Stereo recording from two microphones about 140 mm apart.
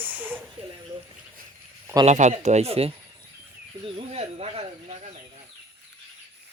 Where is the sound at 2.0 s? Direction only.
55° right (ahead or behind).